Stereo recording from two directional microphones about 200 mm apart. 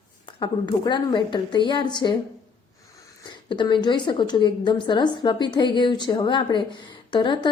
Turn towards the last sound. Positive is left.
turn(degrees=25)  # may be behind; listen again after turning